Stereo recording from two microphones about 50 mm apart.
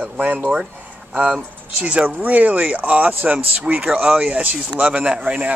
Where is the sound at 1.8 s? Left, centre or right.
Right.